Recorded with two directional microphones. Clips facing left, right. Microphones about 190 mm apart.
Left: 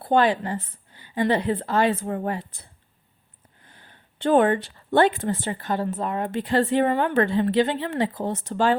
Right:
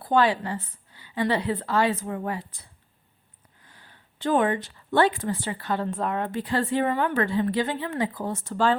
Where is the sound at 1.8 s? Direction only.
60° left (ahead or behind).